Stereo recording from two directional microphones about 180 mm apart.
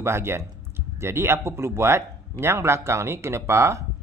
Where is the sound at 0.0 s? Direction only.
15° right (ahead or behind).